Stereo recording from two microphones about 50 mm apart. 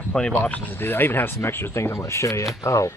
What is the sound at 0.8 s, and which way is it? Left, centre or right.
Speech, left.